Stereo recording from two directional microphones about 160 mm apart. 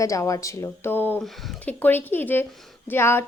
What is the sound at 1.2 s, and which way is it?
Speech, centre (ahead or behind).